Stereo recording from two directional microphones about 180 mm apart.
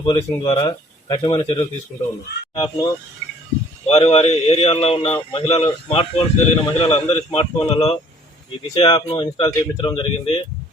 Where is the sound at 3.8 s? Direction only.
35° left (ahead or behind).